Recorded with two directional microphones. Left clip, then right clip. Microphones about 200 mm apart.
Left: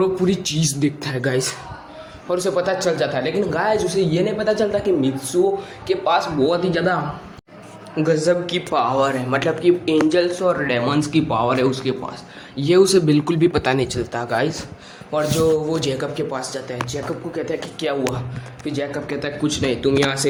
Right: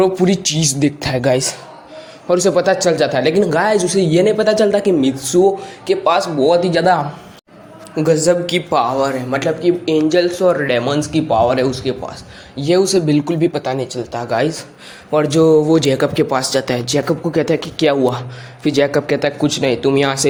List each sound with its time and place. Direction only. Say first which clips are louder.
0.0 s speech: right 5 dB; 40° right (ahead or behind)
8.0 s a man's voice: right 4 dB; 20° right (ahead or behind)
9.0 s a man's voice: right 2 dB; 10° right (ahead or behind)
13.2 s speech: right 1 dB; centre (ahead or behind)
14.3 s a man's voice: right 5 dB; 15° right (ahead or behind)
15.4 s speech: right 9 dB; 40° right (ahead or behind)